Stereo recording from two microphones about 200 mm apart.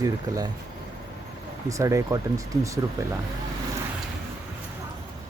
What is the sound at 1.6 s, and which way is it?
Speech, 15° right (ahead or behind).